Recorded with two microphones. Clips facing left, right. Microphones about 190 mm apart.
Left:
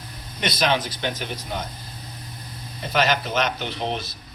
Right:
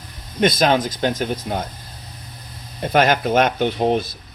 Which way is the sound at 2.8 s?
50° right (ahead or behind).